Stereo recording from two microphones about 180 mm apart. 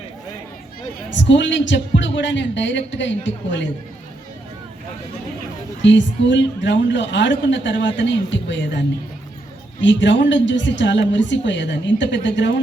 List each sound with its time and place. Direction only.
1.1 s a man's voice: 85° left
5.8 s a woman's voice: 90° left
9.8 s a woman's voice: 90° left